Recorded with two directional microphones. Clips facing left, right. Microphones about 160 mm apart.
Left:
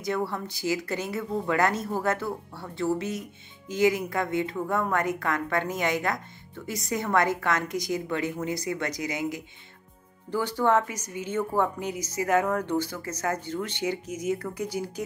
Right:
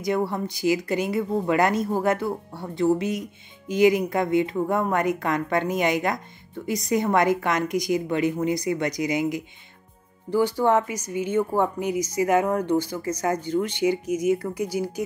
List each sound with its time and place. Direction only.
0.0 s speech: 15° right (ahead or behind)